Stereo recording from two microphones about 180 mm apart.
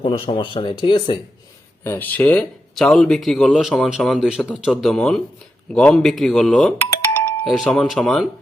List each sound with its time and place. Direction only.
0.0 s speech: 30° left (ahead or behind)
1.8 s speech: 10° left (ahead or behind)
7.4 s speech: centre (ahead or behind)